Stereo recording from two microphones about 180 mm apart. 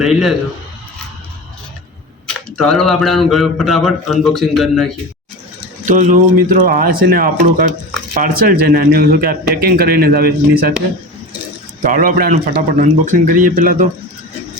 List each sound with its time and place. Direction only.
0.0 s a man's voice: centre (ahead or behind)
2.2 s speech: centre (ahead or behind)
5.8 s a man's voice: 45° right (ahead or behind)
11.9 s speech: 50° right (ahead or behind)